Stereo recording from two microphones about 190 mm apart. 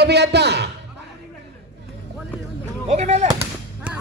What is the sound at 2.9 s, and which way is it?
Artillery fire, 35° right (ahead or behind).